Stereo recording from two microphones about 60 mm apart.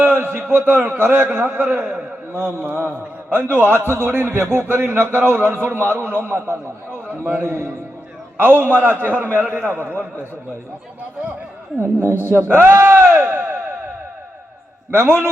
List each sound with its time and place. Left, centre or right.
0.0 s a man's voice: right
2.3 s a man's voice: right
12.0 s a man's voice: right
14.9 s a man's voice: right